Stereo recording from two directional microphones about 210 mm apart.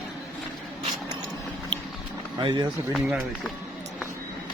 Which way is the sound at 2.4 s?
20° right (ahead or behind).